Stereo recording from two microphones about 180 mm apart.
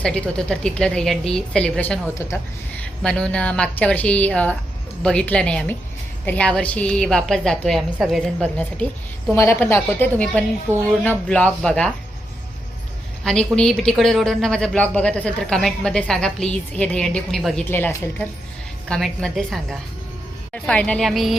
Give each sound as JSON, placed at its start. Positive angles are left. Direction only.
{"t": 0.0, "sound": "speech", "side_deg": 5}
{"t": 2.1, "sound": "a woman's voice", "side_deg": 15}
{"t": 3.0, "sound": "a woman's voice", "side_deg": 5}
{"t": 10.7, "sound": "speech", "side_deg": -15}
{"t": 11.0, "sound": "a woman's voice", "side_deg": 10}
{"t": 13.2, "sound": "speech", "side_deg": 5}